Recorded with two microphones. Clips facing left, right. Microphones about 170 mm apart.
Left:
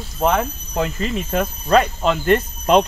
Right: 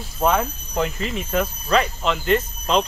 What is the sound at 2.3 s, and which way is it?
Speech, 55° left (ahead or behind).